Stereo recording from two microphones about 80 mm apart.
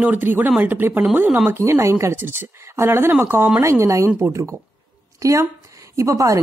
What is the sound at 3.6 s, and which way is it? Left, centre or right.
Speech, right.